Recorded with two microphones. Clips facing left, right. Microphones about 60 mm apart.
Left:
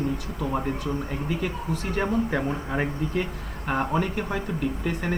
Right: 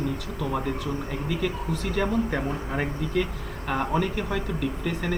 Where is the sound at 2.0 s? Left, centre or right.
Left.